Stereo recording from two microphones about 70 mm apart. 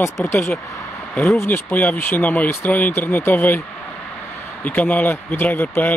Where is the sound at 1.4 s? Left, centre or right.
Left.